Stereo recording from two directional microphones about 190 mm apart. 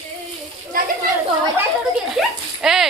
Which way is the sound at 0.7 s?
45° right (ahead or behind).